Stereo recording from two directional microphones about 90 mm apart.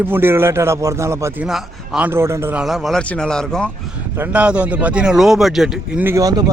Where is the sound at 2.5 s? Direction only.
Centre (ahead or behind).